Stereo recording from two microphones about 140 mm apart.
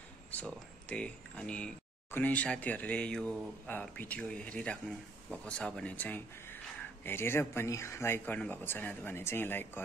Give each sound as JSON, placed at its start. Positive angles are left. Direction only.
{"t": 0.3, "sound": "speech", "side_deg": 10}